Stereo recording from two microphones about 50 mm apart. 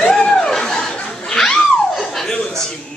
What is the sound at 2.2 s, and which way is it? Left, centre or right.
Chuckle, centre.